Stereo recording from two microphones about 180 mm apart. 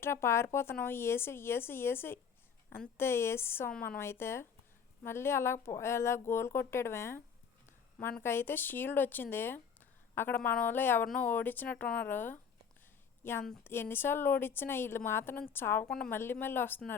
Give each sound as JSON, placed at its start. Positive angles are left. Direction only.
{"t": 0.0, "sound": "a woman's voice", "side_deg": 15}
{"t": 3.8, "sound": "a woman's voice", "side_deg": 55}
{"t": 4.0, "sound": "a woman's voice", "side_deg": 15}
{"t": 13.4, "sound": "a woman's voice", "side_deg": 5}